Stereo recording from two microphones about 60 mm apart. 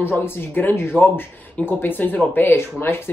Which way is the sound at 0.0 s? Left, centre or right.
Left.